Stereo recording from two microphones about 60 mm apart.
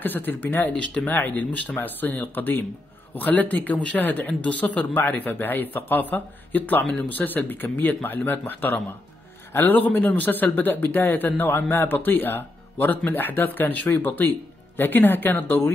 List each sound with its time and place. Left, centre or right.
0.0 s a man's voice: left